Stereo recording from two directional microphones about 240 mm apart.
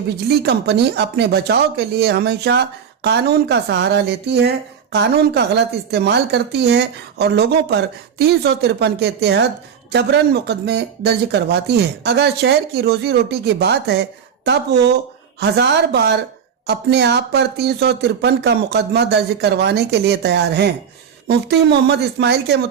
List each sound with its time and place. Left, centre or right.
0.3 s speech: right